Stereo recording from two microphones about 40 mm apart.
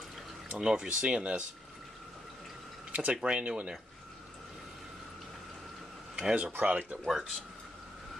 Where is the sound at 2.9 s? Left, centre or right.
Right.